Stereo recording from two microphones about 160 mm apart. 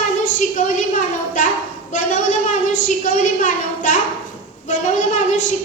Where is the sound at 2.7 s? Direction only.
55° left (ahead or behind).